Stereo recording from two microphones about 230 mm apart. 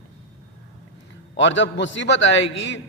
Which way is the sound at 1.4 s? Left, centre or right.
Left.